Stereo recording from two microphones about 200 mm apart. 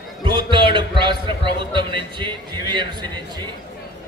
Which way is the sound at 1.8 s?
25° right (ahead or behind).